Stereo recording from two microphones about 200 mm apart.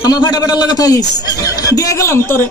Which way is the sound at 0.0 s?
20° left (ahead or behind).